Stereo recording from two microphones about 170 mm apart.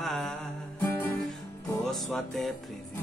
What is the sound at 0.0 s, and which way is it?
Music, centre (ahead or behind).